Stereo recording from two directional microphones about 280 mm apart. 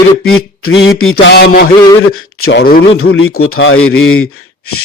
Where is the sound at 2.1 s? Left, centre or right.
Left.